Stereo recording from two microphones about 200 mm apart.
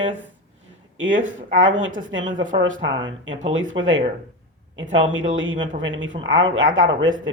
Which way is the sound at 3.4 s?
75° right (ahead or behind).